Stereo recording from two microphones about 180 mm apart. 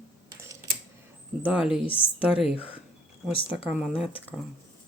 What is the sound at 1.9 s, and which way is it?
Speech, 30° left (ahead or behind).